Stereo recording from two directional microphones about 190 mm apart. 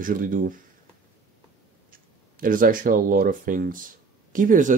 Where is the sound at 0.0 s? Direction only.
45° right (ahead or behind).